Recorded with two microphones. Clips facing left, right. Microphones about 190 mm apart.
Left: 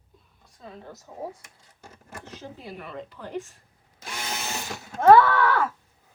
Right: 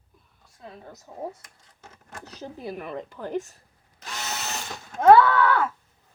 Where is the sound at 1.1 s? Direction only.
20° right (ahead or behind).